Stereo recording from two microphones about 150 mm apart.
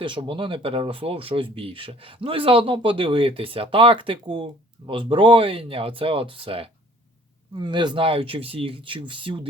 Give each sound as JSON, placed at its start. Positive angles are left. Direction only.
{"t": 0.0, "sound": "speech", "side_deg": -35}